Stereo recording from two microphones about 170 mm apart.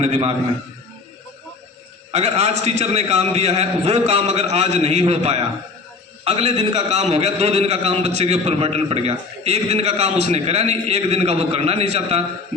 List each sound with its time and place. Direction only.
0.0 s a man's voice: 35° right (ahead or behind)
2.1 s a man's voice: 40° right (ahead or behind)